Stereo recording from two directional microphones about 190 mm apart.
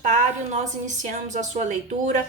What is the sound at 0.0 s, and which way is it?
A woman's voice, 40° right (ahead or behind).